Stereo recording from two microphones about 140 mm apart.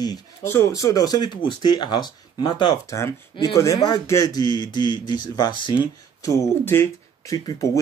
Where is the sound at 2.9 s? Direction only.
20° left (ahead or behind).